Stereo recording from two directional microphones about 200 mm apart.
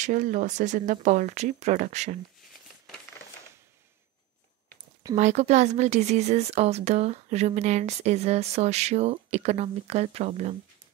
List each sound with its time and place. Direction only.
0.0 s speech: 40° right (ahead or behind)
5.1 s speech: 35° right (ahead or behind)